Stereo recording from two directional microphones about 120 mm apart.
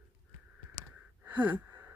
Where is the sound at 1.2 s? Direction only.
15° right (ahead or behind).